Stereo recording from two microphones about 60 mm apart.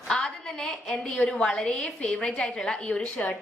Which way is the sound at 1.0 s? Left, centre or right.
Centre.